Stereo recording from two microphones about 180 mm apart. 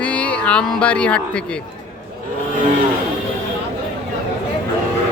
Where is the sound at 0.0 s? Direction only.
5° left (ahead or behind).